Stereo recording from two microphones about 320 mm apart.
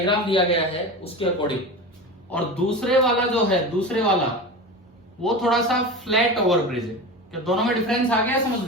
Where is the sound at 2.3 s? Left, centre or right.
Centre.